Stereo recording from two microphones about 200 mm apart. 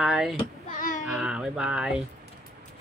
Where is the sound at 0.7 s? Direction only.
40° left (ahead or behind).